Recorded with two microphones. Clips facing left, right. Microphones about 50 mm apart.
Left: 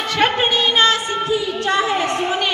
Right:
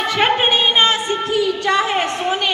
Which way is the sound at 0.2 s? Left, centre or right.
Centre.